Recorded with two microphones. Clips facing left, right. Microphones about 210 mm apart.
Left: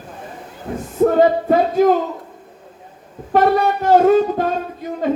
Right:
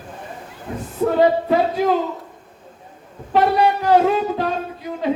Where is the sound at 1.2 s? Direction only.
45° left (ahead or behind).